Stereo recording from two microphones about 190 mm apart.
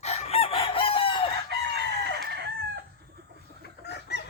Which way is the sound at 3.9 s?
60° left (ahead or behind).